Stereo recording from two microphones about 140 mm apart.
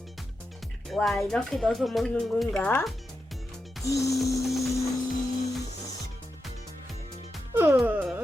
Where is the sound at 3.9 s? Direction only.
25° left (ahead or behind).